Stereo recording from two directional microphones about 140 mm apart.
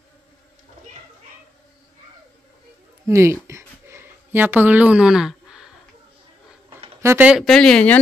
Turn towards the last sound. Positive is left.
turn(degrees=10)  # may be behind; listen again after turning